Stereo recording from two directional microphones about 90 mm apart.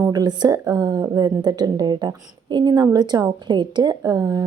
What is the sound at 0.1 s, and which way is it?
A woman's voice, 50° right (ahead or behind).